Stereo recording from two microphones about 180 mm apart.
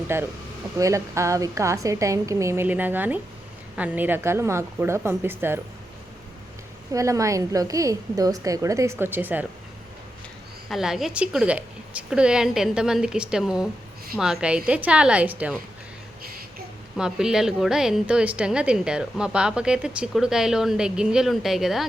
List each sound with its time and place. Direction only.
0.1 s a woman's voice: 15° right (ahead or behind)
6.9 s a woman's voice: 15° right (ahead or behind)
10.7 s a woman's voice: centre (ahead or behind)
17.0 s a woman's voice: 5° right (ahead or behind)